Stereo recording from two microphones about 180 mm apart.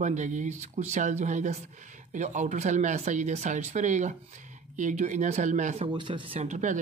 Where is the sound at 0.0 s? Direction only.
40° right (ahead or behind).